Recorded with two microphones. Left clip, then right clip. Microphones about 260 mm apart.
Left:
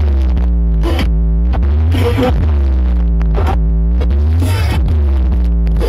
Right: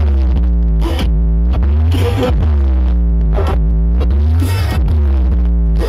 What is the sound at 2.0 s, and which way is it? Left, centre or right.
Music, centre.